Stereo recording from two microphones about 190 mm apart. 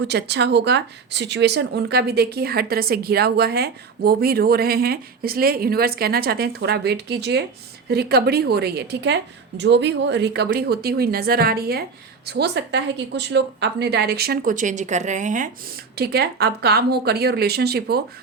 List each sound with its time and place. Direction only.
0.0 s speech: 65° right (ahead or behind)